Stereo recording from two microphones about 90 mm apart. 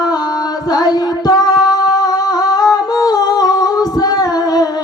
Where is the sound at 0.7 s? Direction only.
45° left (ahead or behind).